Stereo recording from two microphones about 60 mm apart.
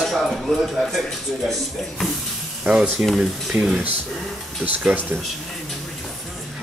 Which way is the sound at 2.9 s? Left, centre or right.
Centre.